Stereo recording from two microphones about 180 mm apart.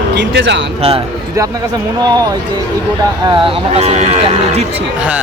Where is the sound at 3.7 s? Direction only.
35° right (ahead or behind).